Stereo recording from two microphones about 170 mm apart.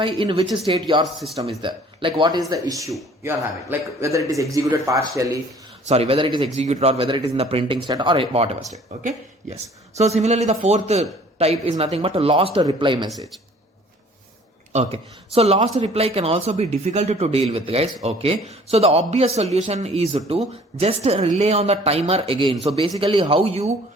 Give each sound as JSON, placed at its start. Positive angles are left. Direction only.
{"t": 0.0, "sound": "a man's voice", "side_deg": -30}
{"t": 1.0, "sound": "speech", "side_deg": 0}
{"t": 1.6, "sound": "a man's voice", "side_deg": -30}
{"t": 5.9, "sound": "speech", "side_deg": -35}
{"t": 6.6, "sound": "a woman's voice", "side_deg": -40}
{"t": 14.7, "sound": "speech", "side_deg": -40}